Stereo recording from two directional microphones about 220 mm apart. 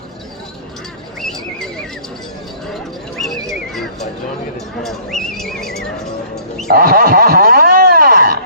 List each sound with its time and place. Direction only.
1.2 s neigh: centre (ahead or behind)
4.8 s neigh: centre (ahead or behind)
6.7 s a sound: 40° right (ahead or behind)